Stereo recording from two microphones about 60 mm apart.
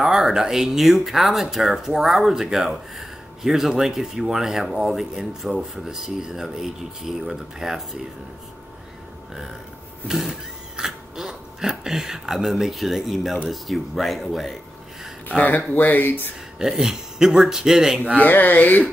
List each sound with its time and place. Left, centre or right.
0.0 s speech: centre
10.0 s speech: centre
15.2 s speech: left
16.5 s speech: centre
18.2 s speech: left